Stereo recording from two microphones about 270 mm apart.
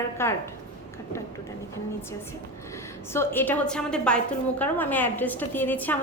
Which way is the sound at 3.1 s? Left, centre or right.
Centre.